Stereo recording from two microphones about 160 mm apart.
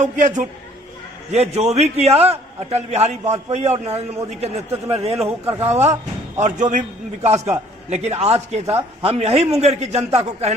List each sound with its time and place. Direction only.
0.0 s a man's voice: 50° right (ahead or behind)